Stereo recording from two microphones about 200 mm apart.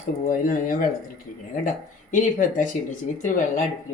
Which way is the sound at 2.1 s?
40° left (ahead or behind).